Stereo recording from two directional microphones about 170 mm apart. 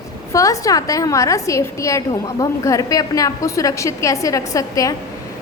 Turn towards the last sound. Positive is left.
turn(degrees=20)  # may be behind; listen again after turning